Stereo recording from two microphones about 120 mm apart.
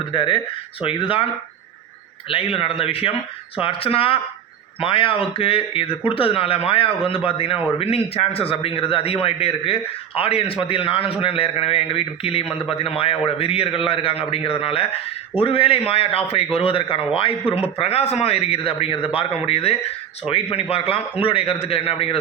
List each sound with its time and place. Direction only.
0.0 s a man's voice: 45° left (ahead or behind)
2.3 s a man's voice: 50° left (ahead or behind)
17.7 s a man's voice: 60° left (ahead or behind)